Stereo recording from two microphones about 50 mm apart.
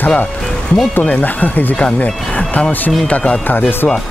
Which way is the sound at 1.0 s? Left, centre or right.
Left.